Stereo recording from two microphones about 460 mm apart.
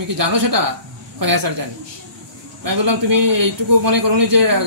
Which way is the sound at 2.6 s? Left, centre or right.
Right.